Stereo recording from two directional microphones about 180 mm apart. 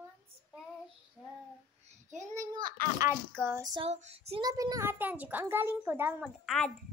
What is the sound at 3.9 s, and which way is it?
Child singing, 35° right (ahead or behind).